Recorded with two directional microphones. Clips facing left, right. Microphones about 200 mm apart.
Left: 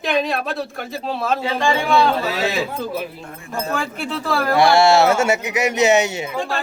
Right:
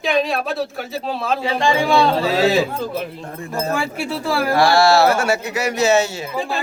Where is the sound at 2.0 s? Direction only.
30° right (ahead or behind).